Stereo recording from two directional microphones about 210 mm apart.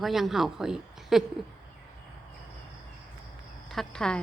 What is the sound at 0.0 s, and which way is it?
Speech, centre (ahead or behind).